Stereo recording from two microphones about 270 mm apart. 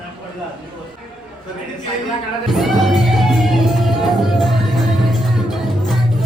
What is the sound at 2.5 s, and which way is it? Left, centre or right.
Music, centre.